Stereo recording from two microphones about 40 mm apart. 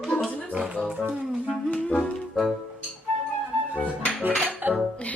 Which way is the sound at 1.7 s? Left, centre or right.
Left.